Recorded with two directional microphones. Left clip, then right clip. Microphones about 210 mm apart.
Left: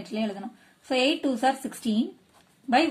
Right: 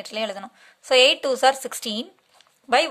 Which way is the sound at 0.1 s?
40° right (ahead or behind).